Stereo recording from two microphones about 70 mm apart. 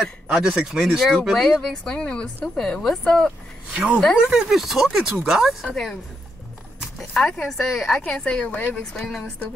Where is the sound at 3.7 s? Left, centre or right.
Centre.